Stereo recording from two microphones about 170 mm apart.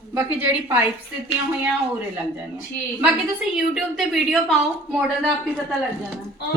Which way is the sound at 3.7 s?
Centre (ahead or behind).